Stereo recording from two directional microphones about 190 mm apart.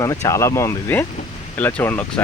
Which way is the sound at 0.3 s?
15° left (ahead or behind).